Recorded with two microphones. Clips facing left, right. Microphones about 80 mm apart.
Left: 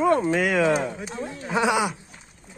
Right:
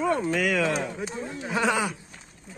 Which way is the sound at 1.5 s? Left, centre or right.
Centre.